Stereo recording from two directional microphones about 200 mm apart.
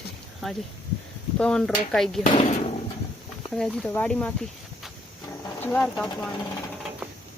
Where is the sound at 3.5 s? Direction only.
Centre (ahead or behind).